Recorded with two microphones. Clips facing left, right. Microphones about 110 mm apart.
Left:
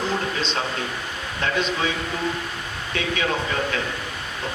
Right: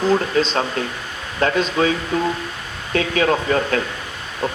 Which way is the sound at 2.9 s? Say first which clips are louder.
Right 7 dB; 40° right (ahead or behind).